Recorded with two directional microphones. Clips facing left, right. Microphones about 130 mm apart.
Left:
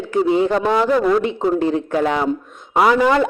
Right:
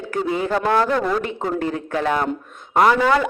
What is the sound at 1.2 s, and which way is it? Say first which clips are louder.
Speech: left 6 dB; 25° left (ahead or behind).